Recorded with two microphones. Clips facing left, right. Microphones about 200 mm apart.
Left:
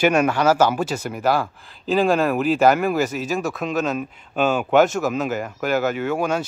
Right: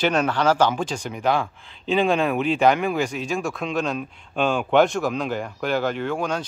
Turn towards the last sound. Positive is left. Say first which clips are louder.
# left 3 dB
turn(degrees=5)  # may be behind; listen again after turning